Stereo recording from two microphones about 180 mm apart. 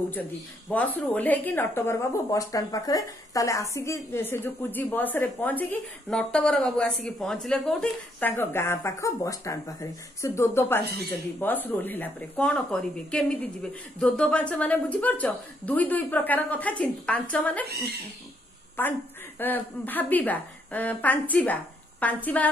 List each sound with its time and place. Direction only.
0.1 s a woman's voice: 10° left (ahead or behind)
17.6 s speech: 60° right (ahead or behind)
18.8 s a woman's voice: 10° left (ahead or behind)